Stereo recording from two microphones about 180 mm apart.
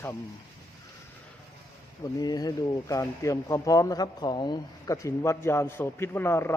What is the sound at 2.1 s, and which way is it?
Speech, 20° left (ahead or behind).